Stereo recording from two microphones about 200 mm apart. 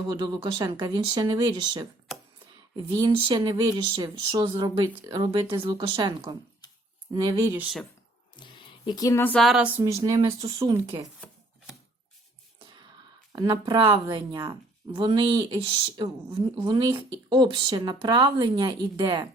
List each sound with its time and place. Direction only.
0.0 s speech: 20° right (ahead or behind); by 7.9 s 5° right (ahead or behind)
8.4 s speech: 25° left (ahead or behind); by 9.7 s 5° right (ahead or behind)
9.8 s speech: 20° right (ahead or behind)
11.2 s chopping: centre (ahead or behind)
13.3 s speech: 20° right (ahead or behind)